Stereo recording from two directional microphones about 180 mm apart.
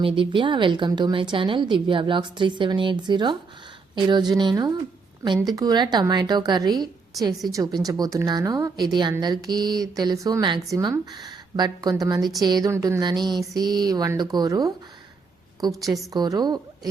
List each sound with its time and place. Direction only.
0.0 s a woman's voice: 30° right (ahead or behind)